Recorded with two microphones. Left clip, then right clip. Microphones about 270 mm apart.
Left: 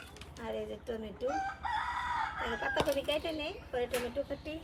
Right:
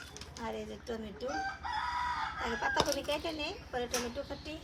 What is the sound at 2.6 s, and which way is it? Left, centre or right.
Speech, centre.